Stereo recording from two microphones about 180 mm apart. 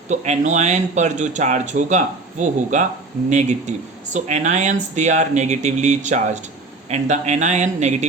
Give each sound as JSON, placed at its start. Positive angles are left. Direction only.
{"t": 0.1, "sound": "speech", "side_deg": -40}